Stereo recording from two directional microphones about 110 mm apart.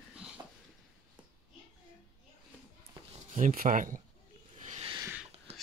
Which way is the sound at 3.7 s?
90° right.